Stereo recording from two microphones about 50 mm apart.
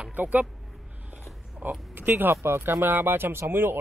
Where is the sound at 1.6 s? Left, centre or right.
Right.